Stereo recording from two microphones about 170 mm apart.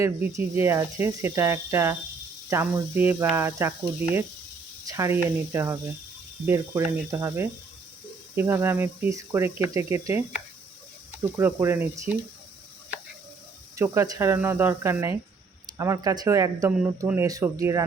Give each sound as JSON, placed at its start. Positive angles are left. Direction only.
{"t": 0.0, "sound": "speech", "side_deg": -15}
{"t": 11.2, "sound": "speech", "side_deg": -15}
{"t": 13.7, "sound": "speech", "side_deg": -15}